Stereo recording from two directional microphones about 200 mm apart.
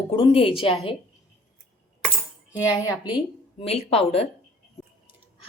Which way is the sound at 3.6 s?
30° left (ahead or behind).